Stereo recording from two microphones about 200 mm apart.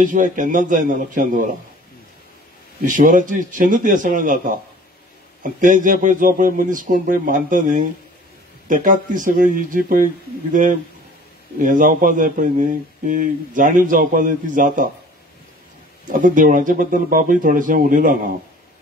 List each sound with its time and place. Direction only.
0.0 s a man's voice: 40° right (ahead or behind)
2.8 s a man's voice: 40° right (ahead or behind)
16.1 s a man's voice: 40° right (ahead or behind)